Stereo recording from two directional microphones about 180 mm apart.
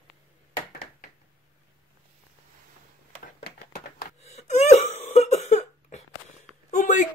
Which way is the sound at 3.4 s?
60° left (ahead or behind).